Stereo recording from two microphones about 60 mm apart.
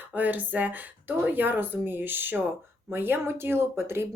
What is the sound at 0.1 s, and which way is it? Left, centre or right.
Speech, right.